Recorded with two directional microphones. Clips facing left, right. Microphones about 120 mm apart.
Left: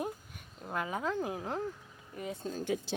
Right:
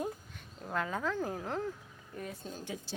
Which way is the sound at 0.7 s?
15° left (ahead or behind).